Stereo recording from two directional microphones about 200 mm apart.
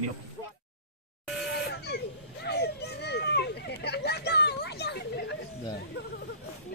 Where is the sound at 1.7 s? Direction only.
55° left (ahead or behind).